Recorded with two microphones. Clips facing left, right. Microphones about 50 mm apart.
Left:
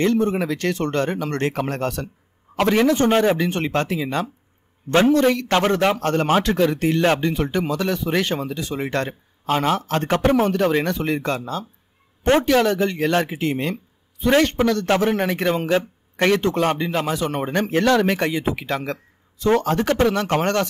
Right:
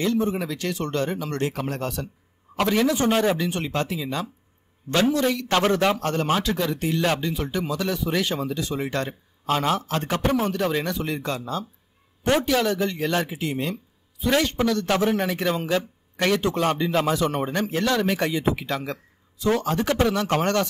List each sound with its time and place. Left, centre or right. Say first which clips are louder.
0.0 s speech: left 4 dB; left
3.1 s a man's voice: left 4 dB; left
3.3 s speech: left 4 dB; left
9.5 s a man's voice: left 3 dB; left
9.8 s speech: left 5 dB; left